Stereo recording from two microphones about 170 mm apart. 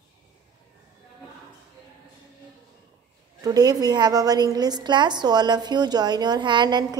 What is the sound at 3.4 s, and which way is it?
A woman's voice, 20° right (ahead or behind).